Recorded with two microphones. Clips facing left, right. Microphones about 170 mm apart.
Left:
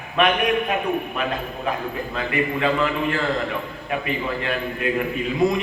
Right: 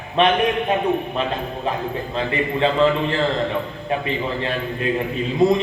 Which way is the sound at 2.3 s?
30° right (ahead or behind).